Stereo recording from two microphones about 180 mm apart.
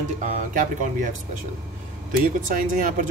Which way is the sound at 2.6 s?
45° right (ahead or behind).